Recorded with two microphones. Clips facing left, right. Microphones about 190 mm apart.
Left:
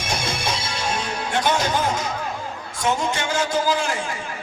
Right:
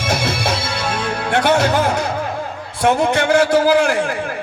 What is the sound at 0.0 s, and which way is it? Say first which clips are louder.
Music: right 6 dB; 65° right (ahead or behind).